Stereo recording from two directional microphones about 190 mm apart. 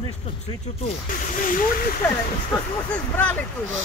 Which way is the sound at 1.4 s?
45° left (ahead or behind).